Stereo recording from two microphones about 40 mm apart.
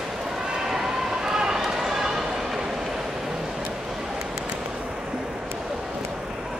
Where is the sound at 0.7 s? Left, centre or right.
Centre.